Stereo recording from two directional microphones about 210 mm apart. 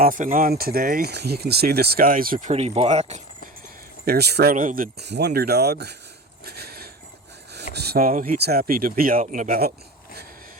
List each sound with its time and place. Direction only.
0.0 s speech: 40° right (ahead or behind)
4.0 s speech: 50° right (ahead or behind)
6.4 s a sound: 50° right (ahead or behind)
7.5 s speech: 50° right (ahead or behind)